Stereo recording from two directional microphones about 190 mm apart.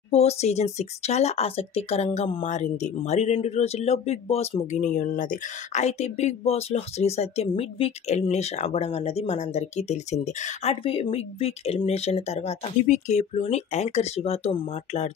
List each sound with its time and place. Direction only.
0.1 s speech: 35° left (ahead or behind)